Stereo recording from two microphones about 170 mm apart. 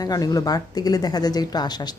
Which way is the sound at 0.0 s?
20° left (ahead or behind).